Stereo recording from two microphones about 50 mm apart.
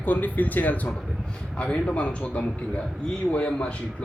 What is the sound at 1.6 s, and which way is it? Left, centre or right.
A man's voice, left.